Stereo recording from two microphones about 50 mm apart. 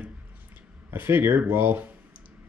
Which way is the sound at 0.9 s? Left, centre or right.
Right.